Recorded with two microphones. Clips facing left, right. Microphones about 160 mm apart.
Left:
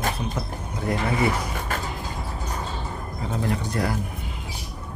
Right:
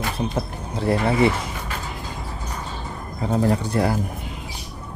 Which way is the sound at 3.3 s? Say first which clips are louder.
Right 7 dB; 35° right (ahead or behind).